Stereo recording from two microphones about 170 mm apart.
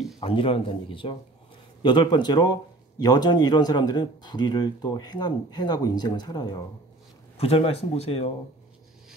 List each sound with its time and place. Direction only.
0.2 s speech: 30° left (ahead or behind)
7.3 s speech: 35° left (ahead or behind)